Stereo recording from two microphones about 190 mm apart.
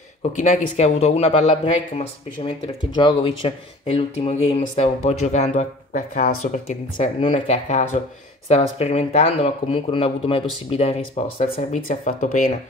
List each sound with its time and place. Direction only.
0.4 s speech: 35° left (ahead or behind)